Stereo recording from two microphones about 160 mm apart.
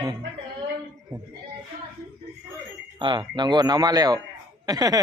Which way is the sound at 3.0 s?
30° right (ahead or behind).